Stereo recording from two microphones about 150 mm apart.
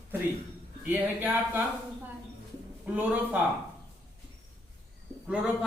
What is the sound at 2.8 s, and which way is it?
Speech, 10° right (ahead or behind).